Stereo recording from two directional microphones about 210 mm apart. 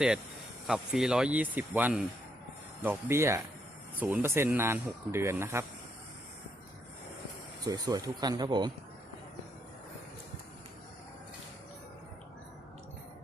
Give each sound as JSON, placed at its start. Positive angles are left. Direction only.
{"t": 0.7, "sound": "speech", "side_deg": -5}
{"t": 7.7, "sound": "speech", "side_deg": -15}